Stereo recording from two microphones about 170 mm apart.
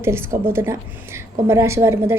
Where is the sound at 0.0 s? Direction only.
15° right (ahead or behind).